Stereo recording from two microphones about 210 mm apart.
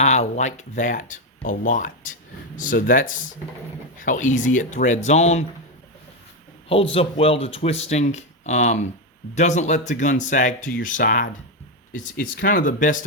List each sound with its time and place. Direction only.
0.0 s speech: 35° left (ahead or behind)
6.7 s speech: 25° left (ahead or behind); by 11.3 s 40° left (ahead or behind)
12.4 s speech: 40° left (ahead or behind)